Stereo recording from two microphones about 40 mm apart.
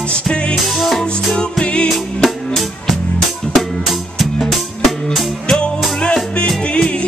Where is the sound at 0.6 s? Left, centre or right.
Centre.